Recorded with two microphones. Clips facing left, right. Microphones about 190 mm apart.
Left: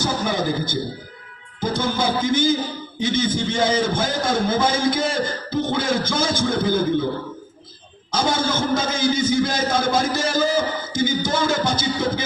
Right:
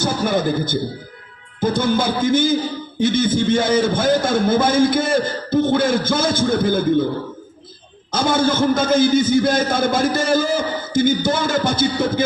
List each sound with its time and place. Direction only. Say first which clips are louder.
0.0 s a sound: right 3 dB; 55° right (ahead or behind)
1.6 s a man's voice: right 4 dB; 55° right (ahead or behind)
8.1 s a man's voice: right 4 dB; 55° right (ahead or behind)